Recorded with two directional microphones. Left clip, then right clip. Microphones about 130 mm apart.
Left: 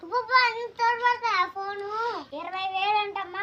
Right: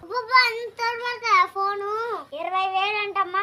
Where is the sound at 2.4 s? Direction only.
25° right (ahead or behind).